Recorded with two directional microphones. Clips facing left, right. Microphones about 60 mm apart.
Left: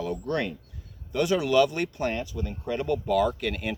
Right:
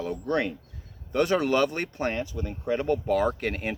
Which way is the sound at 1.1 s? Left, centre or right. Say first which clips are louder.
Right 1 dB; right.